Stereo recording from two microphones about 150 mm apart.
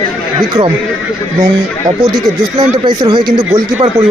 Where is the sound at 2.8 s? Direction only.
30° right (ahead or behind).